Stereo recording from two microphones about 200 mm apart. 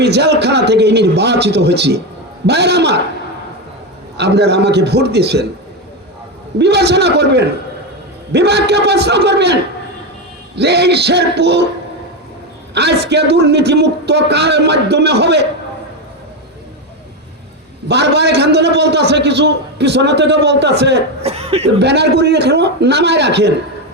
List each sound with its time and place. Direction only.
0.0 s a man's voice: 55° right (ahead or behind)
4.2 s a man's voice: 55° right (ahead or behind)
6.6 s a man's voice: 55° right (ahead or behind)
12.7 s a man's voice: 55° right (ahead or behind)
17.8 s a man's voice: 55° right (ahead or behind)
21.2 s speech: 30° right (ahead or behind)
21.8 s a man's voice: 55° right (ahead or behind)